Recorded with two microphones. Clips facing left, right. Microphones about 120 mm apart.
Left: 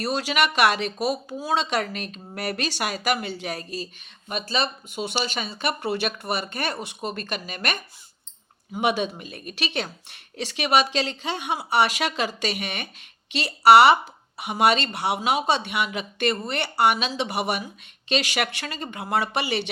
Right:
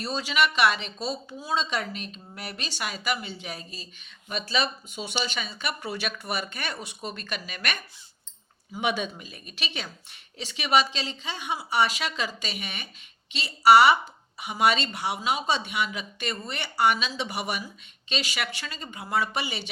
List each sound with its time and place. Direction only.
0.0 s speech: 75° left (ahead or behind)
0.9 s speech: 10° left (ahead or behind)
1.4 s speech: 75° left (ahead or behind)
4.3 s speech: 50° left (ahead or behind)
8.8 s a woman's voice: 55° left (ahead or behind)